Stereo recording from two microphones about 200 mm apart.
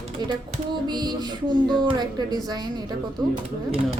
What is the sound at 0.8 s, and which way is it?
Speech, 20° right (ahead or behind).